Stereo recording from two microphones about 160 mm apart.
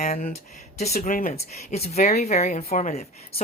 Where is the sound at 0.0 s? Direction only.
50° left (ahead or behind).